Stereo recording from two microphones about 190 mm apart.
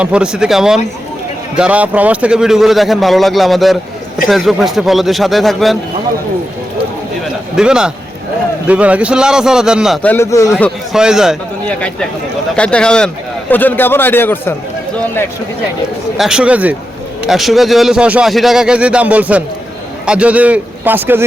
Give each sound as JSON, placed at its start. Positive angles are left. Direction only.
{"t": 0.0, "sound": "speech", "side_deg": -5}
{"t": 7.5, "sound": "speech", "side_deg": -5}
{"t": 10.0, "sound": "a man's voice", "side_deg": 10}
{"t": 10.9, "sound": "speech", "side_deg": -5}
{"t": 12.5, "sound": "a man's voice", "side_deg": 5}
{"t": 16.1, "sound": "a man's voice", "side_deg": -5}